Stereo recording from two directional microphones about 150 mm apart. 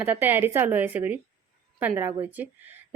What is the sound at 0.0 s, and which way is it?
Speech, 15° right (ahead or behind).